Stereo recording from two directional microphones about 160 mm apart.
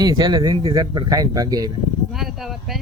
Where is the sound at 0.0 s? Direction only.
25° right (ahead or behind).